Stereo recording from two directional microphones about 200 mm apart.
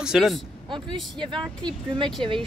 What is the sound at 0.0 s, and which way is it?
Speech, centre (ahead or behind).